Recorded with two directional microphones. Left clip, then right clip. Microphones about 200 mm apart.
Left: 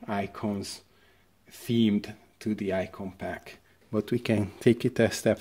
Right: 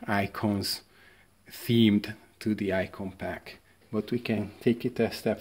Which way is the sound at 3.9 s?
25° left (ahead or behind).